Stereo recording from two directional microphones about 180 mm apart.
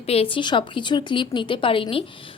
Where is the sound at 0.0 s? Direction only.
35° left (ahead or behind).